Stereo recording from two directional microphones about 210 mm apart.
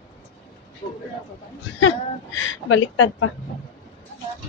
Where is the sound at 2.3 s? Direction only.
70° left (ahead or behind).